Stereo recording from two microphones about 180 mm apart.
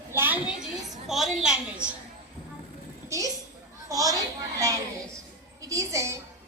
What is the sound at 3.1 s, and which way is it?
A woman's voice, 20° right (ahead or behind).